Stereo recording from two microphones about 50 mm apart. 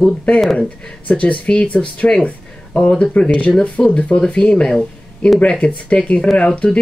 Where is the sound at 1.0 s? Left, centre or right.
Left.